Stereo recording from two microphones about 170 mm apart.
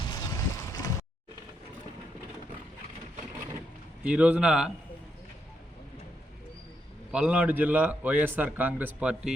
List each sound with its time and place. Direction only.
0.1 s boat: 20° left (ahead or behind)
4.0 s a man's voice: 5° right (ahead or behind)
7.1 s a man's voice: 5° right (ahead or behind)